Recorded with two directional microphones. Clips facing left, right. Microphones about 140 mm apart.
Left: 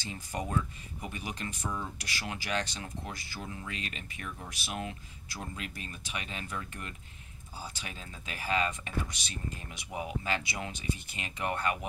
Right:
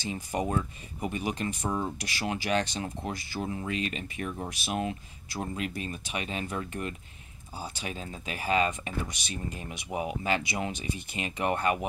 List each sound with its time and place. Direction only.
0.0 s speech: 15° right (ahead or behind)